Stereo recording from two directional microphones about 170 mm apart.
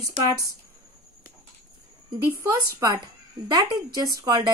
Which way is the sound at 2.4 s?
20° right (ahead or behind).